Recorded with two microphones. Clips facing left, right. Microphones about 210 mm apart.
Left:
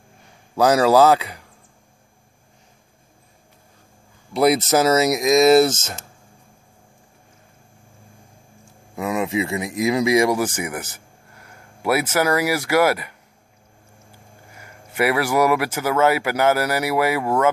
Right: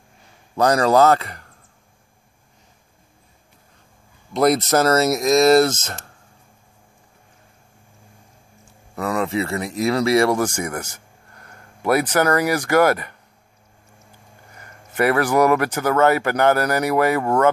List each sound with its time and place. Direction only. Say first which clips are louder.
0.6 s speech: left 1 dB; 5° left (ahead or behind)
4.3 s speech: even; 5° left (ahead or behind)
8.9 s speech: right 1 dB; 20° left (ahead or behind)
9.3 s speech: even; 10° left (ahead or behind)
14.5 s speech: left 1 dB; 10° left (ahead or behind)